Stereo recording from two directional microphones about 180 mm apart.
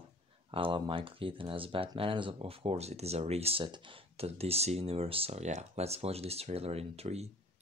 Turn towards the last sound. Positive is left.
turn(degrees=-35)  # may be behind; listen again after turning